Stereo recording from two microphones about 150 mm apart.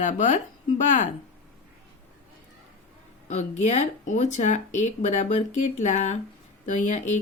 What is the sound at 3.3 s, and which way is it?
Speech, 50° left (ahead or behind).